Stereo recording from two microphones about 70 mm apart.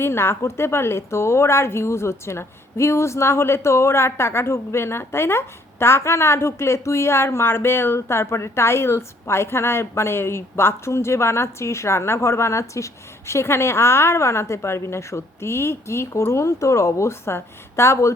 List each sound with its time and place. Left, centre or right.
0.0 s a woman's voice: left